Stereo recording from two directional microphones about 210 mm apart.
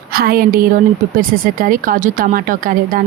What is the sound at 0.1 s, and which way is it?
Speech, 45° right (ahead or behind).